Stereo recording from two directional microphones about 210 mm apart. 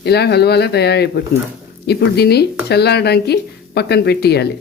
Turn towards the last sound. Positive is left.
turn(degrees=50)  # may be behind; listen again after turning